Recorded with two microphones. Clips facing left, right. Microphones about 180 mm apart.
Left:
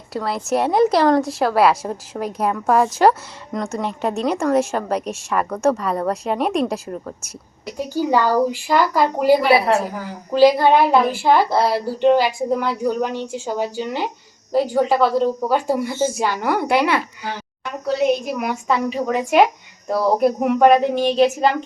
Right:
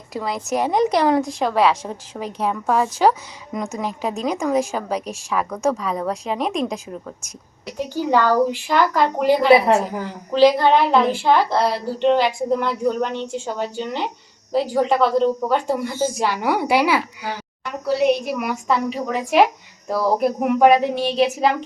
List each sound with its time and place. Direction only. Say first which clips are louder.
0.1 s a woman's voice: left 2 dB; centre (ahead or behind)
3.5 s a woman's voice: left 2 dB; 5° right (ahead or behind)
8.1 s a woman's voice: right 1 dB; 10° left (ahead or behind)
9.5 s a woman's voice: right 2 dB; 20° right (ahead or behind)
10.3 s a woman's voice: left 1 dB; 10° left (ahead or behind)
16.3 s a woman's voice: even; 10° right (ahead or behind)